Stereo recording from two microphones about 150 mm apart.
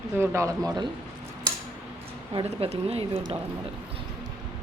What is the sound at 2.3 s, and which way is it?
Speech, 40° right (ahead or behind).